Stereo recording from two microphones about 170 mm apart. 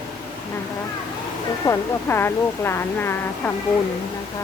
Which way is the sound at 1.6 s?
15° left (ahead or behind).